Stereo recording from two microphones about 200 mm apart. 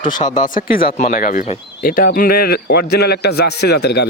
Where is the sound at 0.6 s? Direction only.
45° left (ahead or behind).